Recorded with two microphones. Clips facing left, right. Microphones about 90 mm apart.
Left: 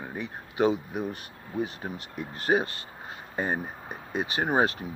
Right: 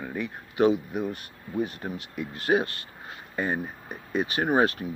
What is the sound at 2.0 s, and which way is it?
Speech, 40° left (ahead or behind).